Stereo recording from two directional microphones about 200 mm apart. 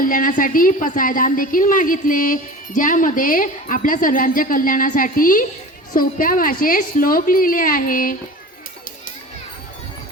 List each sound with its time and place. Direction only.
0.0 s a woman's voice: 40° left (ahead or behind)